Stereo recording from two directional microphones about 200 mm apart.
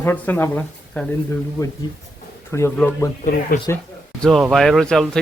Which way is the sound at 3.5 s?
45° left (ahead or behind).